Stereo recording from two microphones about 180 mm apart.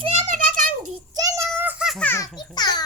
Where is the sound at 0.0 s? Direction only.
35° right (ahead or behind).